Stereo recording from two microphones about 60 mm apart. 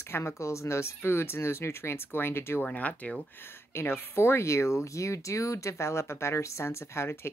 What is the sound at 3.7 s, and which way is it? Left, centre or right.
Speech, left.